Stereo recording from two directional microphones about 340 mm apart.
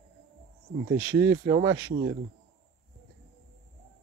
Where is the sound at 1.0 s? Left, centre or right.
Centre.